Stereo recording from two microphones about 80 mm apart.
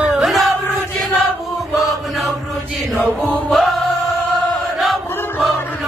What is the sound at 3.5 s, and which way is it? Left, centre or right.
Music, centre.